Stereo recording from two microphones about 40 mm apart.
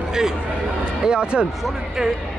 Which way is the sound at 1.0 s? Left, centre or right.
Right.